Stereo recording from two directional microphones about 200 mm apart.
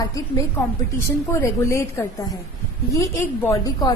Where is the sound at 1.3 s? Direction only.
15° left (ahead or behind).